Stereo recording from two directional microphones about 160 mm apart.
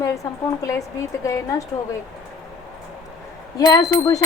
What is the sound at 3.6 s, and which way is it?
Speech, 20° left (ahead or behind).